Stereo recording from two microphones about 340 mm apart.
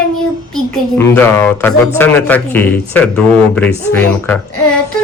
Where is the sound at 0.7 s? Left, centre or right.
Centre.